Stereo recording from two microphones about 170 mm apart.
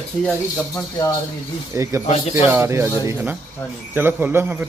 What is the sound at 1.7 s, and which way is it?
A man's voice, 20° right (ahead or behind).